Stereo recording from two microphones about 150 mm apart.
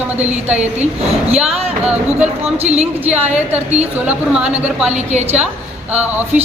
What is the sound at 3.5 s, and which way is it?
Speech, 45° right (ahead or behind).